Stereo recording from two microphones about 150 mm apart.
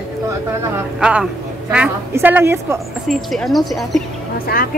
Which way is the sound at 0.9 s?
5° right (ahead or behind).